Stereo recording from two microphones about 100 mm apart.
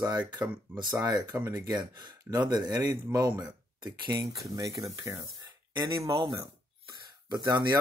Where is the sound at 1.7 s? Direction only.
45° right (ahead or behind).